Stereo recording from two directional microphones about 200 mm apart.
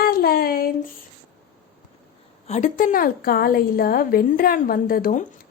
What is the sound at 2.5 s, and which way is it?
A woman's voice, 40° left (ahead or behind).